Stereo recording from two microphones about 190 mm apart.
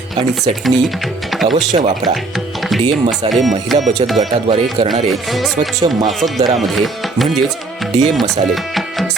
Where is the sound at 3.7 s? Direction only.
Centre (ahead or behind).